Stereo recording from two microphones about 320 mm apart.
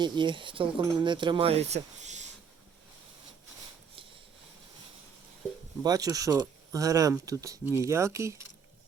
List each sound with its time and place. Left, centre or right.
0.0 s speech: centre
5.8 s speech: centre